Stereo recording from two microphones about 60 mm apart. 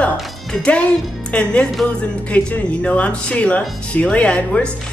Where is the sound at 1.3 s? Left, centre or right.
Centre.